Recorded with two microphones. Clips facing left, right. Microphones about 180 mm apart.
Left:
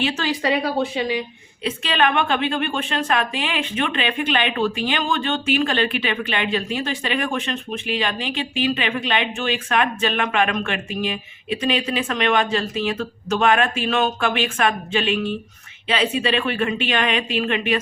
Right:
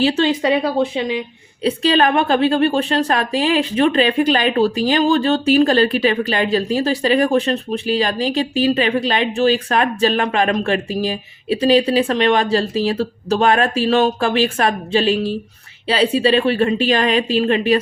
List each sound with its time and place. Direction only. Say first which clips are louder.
0.0 s speech: right 6 dB; 30° right (ahead or behind)
1.6 s a woman's voice: right 6 dB; 35° right (ahead or behind)